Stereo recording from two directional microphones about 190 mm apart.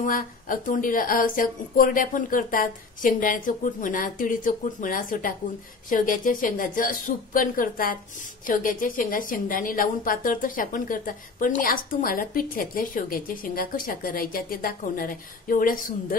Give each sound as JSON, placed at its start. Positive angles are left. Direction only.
{"t": 0.0, "sound": "a woman's voice", "side_deg": 45}